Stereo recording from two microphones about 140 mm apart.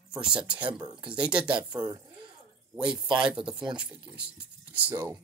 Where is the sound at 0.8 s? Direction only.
35° right (ahead or behind).